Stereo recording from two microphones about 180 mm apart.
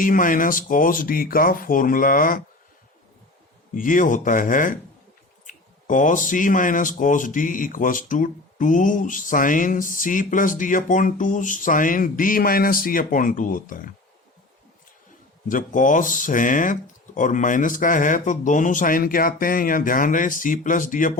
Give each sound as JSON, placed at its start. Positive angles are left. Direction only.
{"t": 0.0, "sound": "speech", "side_deg": 50}
{"t": 3.8, "sound": "speech", "side_deg": 45}
{"t": 15.4, "sound": "speech", "side_deg": 45}